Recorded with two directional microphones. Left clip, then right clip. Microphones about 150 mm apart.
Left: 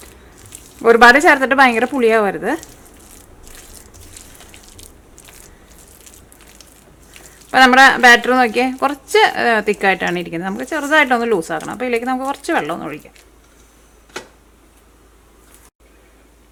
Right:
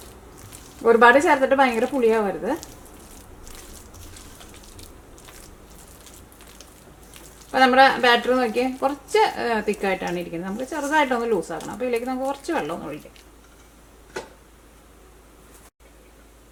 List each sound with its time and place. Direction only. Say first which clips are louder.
0.8 s speech: left 6 dB; 30° left (ahead or behind)
7.5 s speech: left 7 dB; 30° left (ahead or behind)